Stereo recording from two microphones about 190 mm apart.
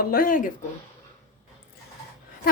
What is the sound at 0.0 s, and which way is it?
Speech, 50° left (ahead or behind).